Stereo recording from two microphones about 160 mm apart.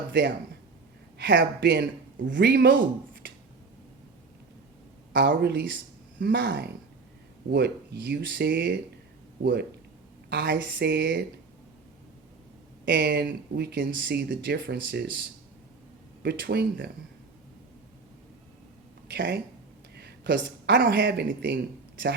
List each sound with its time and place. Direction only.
0.1 s speech: 90° right
5.1 s speech: 90° right
12.8 s speech: 90° right
16.2 s speech: 90° right
19.0 s speech: 90° right